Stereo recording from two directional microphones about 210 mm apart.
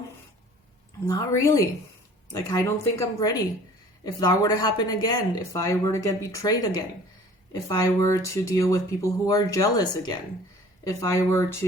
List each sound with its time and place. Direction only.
1.0 s speech: 15° left (ahead or behind)